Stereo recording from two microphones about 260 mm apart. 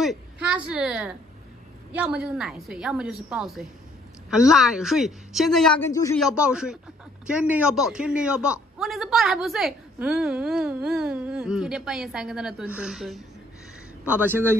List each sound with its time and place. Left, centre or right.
0.0 s a woman's voice: centre
6.2 s a man's voice: centre